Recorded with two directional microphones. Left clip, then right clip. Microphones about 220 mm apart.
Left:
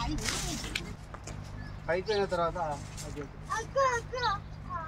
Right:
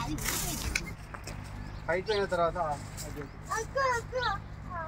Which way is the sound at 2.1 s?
20° left (ahead or behind).